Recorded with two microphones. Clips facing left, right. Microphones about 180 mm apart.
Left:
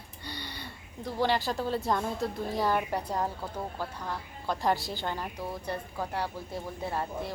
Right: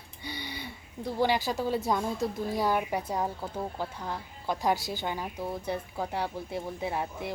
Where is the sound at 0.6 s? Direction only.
10° right (ahead or behind).